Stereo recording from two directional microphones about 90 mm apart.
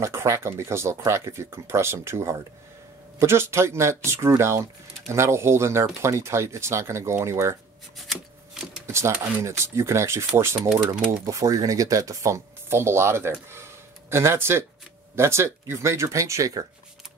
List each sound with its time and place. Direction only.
0.0 s speech: 30° right (ahead or behind)
8.1 s shuffling cards: centre (ahead or behind)
8.8 s a sound: 30° right (ahead or behind)
9.2 s speech: 35° right (ahead or behind)